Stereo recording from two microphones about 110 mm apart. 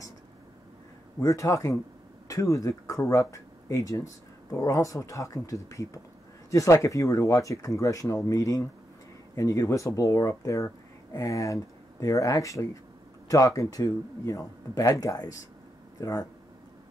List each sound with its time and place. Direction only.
1.2 s speech: 30° left (ahead or behind)